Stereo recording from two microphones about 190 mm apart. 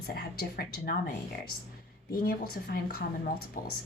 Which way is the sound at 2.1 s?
50° left (ahead or behind).